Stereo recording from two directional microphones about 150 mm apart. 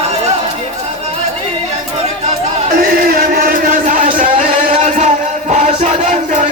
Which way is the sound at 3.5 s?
65° right (ahead or behind).